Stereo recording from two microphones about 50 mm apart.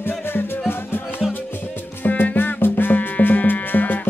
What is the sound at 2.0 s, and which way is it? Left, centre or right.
Music, left.